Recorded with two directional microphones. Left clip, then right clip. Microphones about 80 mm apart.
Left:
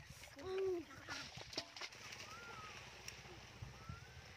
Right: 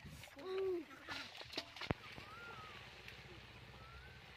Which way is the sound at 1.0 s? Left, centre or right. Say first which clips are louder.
Right 1 dB; right.